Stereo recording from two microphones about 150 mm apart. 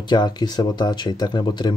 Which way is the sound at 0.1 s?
30° left (ahead or behind).